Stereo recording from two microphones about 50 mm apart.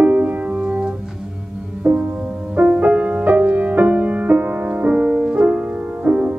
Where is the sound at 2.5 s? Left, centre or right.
Right.